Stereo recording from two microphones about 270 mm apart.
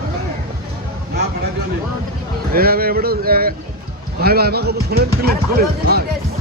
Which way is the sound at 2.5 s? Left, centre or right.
Right.